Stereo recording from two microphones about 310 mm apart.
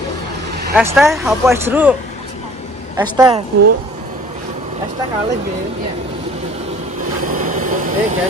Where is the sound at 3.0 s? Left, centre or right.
Centre.